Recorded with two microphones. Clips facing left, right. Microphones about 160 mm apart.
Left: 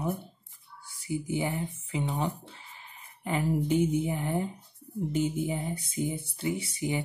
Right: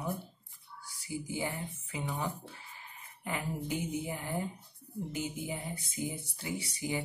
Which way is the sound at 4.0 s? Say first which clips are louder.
Left 6 dB; 25° left (ahead or behind).